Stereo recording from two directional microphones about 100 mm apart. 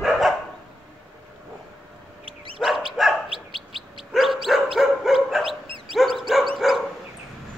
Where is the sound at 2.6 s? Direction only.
Centre (ahead or behind).